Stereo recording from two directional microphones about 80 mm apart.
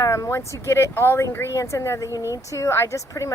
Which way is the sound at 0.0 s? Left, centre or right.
Left.